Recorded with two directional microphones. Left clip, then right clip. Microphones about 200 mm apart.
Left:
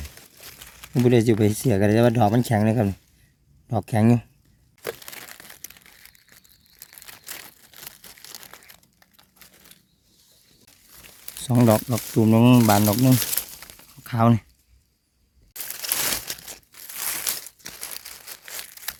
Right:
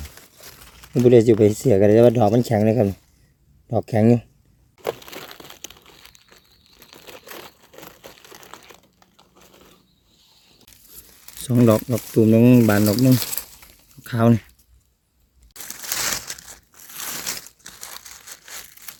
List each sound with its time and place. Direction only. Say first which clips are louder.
0.6 s a sound: right 3 dB; 10° left (ahead or behind)
1.0 s speech: right 6 dB; 35° left (ahead or behind)
5.5 s crumpling: right 4 dB; 15° left (ahead or behind)
8.3 s crumpling: right 2 dB; 25° left (ahead or behind)
11.3 s speech: right 2 dB; 15° left (ahead or behind)
15.5 s crumpling: right 1 dB; 15° left (ahead or behind)